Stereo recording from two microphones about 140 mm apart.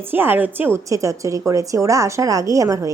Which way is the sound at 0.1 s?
15° right (ahead or behind).